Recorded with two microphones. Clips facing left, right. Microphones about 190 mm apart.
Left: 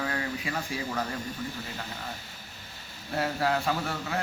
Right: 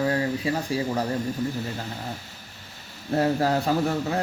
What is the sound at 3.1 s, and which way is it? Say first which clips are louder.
Speech: right 6 dB; 40° right (ahead or behind).